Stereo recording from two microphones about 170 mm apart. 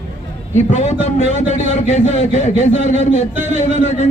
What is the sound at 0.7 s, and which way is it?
A man's voice, 40° left (ahead or behind).